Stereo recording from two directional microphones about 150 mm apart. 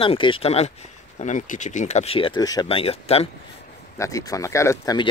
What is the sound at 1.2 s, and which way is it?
Speech, 55° left (ahead or behind).